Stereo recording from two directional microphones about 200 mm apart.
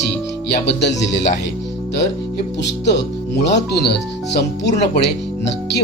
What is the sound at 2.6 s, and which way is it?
Speech, 60° left (ahead or behind).